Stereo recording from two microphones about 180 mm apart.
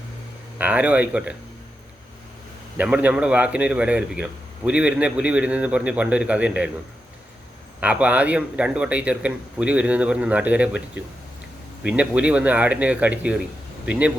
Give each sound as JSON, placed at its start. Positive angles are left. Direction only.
{"t": 0.6, "sound": "speech", "side_deg": -10}
{"t": 2.7, "sound": "speech", "side_deg": -10}
{"t": 7.8, "sound": "speech", "side_deg": -5}